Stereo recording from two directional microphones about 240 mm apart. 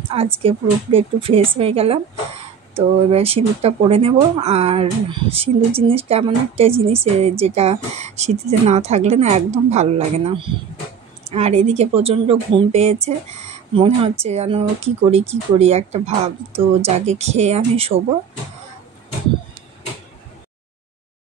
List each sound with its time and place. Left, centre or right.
0.4 s a woman's voice: right